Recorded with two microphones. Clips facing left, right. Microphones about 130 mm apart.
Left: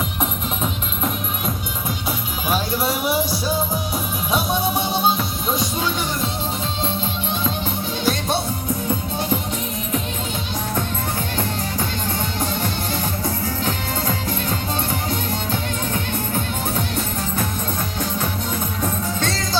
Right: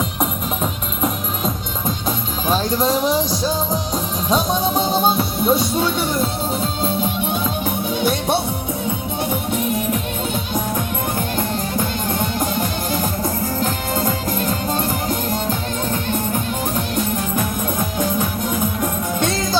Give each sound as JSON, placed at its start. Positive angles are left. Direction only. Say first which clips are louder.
{"t": 0.2, "sound": "music", "louder": "right 2 dB", "side_deg": 0}
{"t": 2.0, "sound": "music", "louder": "right 3 dB", "side_deg": 10}
{"t": 9.6, "sound": "music", "louder": "right 7 dB", "side_deg": -60}
{"t": 11.3, "sound": "music", "louder": "right 3 dB", "side_deg": -45}